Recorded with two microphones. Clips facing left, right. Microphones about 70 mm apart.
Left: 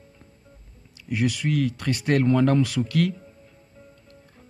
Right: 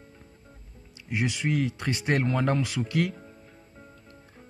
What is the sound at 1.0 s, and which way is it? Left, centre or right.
A man's voice, right.